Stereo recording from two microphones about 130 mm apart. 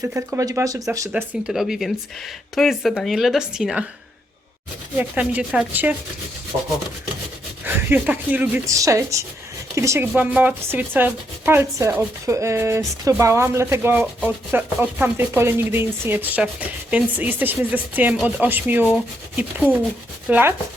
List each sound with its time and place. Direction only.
0.0 s speech: 20° right (ahead or behind)
1.1 s speech: 5° right (ahead or behind)
4.9 s speech: 10° right (ahead or behind)
7.6 s speech: 15° right (ahead or behind)
8.6 s speech: 25° right (ahead or behind)